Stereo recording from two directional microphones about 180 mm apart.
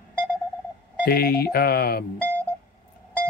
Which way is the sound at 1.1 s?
60° left (ahead or behind).